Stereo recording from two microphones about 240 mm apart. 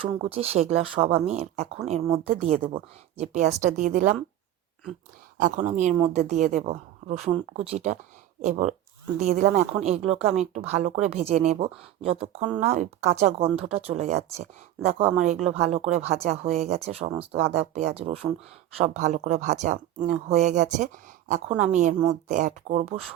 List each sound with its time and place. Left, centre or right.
0.0 s speech: right
5.4 s speech: right